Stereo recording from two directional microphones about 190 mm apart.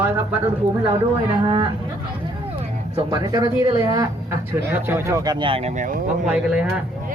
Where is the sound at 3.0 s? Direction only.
20° right (ahead or behind); by 6.0 s 45° right (ahead or behind).